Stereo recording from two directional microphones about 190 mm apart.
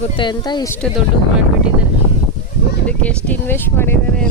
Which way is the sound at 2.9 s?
10° left (ahead or behind).